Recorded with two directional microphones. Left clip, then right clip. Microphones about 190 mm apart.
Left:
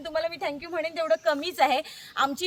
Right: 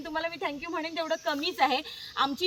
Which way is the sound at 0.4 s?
30° left (ahead or behind).